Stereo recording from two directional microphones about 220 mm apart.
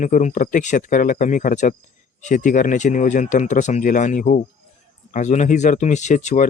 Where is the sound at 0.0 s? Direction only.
35° left (ahead or behind).